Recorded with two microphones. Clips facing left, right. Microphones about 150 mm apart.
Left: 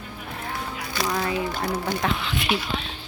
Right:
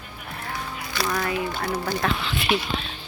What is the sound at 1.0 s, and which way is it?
Speech, 15° left (ahead or behind).